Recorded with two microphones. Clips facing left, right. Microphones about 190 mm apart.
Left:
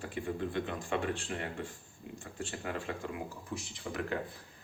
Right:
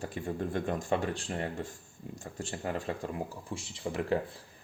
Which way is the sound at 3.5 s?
30° right (ahead or behind).